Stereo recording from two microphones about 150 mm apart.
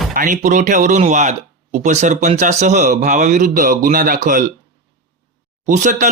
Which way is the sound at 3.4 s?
65° right (ahead or behind).